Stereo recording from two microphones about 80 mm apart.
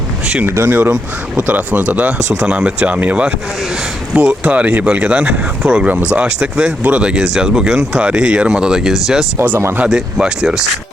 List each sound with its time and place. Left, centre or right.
0.4 s speech: right; by 9.2 s centre
9.4 s speech: right
9.9 s speech: centre